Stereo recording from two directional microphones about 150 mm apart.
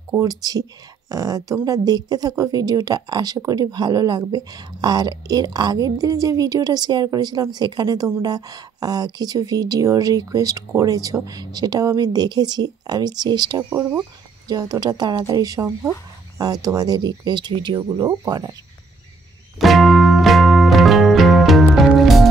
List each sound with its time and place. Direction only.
0.1 s speech: 25° right (ahead or behind)
13.7 s speech: 15° right (ahead or behind)
14.5 s speech: 25° right (ahead or behind)
19.6 s music: centre (ahead or behind)